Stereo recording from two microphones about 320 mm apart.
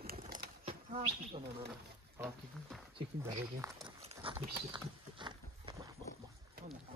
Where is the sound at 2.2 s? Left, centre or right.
Centre.